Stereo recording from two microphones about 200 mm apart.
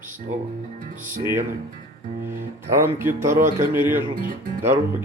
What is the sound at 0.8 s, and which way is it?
Speech, 40° right (ahead or behind).